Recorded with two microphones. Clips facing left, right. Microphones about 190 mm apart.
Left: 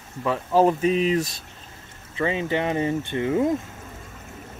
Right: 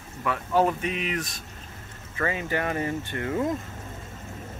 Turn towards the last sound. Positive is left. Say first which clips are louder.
# left 5 dB
turn(degrees=20)  # may be behind; listen again after turning